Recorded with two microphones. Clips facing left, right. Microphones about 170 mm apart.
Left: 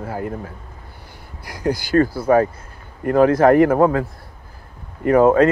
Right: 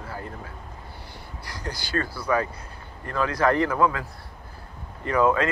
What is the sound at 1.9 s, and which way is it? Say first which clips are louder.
Speech: left 10 dB; 45° left (ahead or behind).